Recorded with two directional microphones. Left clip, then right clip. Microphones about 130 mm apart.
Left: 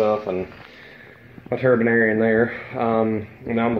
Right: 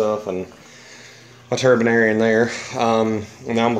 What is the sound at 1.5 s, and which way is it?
Speech, 40° right (ahead or behind).